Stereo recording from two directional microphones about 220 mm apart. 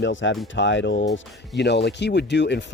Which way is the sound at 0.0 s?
55° left (ahead or behind).